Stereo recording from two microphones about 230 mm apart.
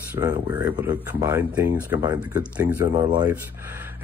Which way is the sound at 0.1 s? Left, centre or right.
Centre.